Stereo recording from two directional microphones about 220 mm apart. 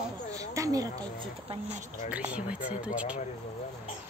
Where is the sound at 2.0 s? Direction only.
5° right (ahead or behind).